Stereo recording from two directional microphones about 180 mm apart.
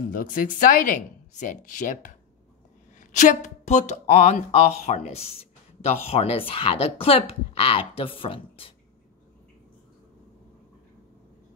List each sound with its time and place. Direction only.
0.2 s speech: 50° left (ahead or behind); by 8.7 s 30° left (ahead or behind)